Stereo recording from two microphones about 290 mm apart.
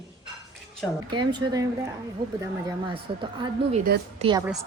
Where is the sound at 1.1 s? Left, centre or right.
Centre.